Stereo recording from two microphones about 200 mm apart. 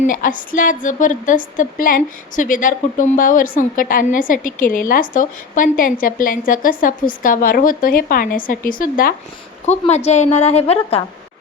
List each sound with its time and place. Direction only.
0.0 s a woman's voice: 40° left (ahead or behind)
9.6 s a woman's voice: 30° left (ahead or behind)